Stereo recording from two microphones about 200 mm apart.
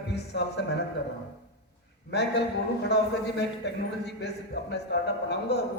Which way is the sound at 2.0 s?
55° left (ahead or behind).